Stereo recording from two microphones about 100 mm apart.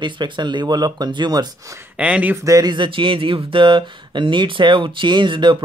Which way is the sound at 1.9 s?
15° right (ahead or behind).